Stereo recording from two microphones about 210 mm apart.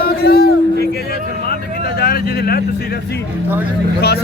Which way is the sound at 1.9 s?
45° left (ahead or behind).